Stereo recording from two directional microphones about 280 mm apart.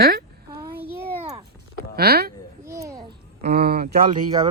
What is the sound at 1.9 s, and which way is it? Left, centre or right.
Speech, right.